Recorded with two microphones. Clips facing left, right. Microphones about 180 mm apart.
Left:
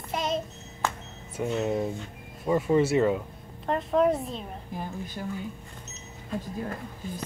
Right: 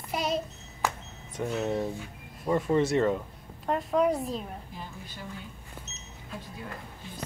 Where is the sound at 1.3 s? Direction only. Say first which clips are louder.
Left 2 dB; 5° left (ahead or behind).